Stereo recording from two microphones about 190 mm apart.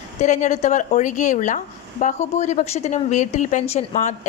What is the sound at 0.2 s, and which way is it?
A woman's voice, 40° left (ahead or behind).